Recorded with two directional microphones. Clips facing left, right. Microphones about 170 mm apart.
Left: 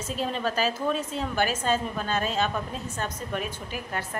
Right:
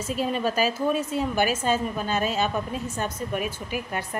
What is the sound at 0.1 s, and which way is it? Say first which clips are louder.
A woman's voice: right 3 dB; 10° right (ahead or behind).